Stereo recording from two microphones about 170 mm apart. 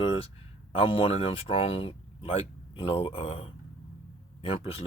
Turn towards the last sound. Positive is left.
turn(degrees=35)  # may be behind; listen again after turning